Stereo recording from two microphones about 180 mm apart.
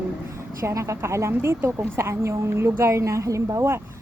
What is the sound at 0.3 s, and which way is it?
Speech, 15° right (ahead or behind).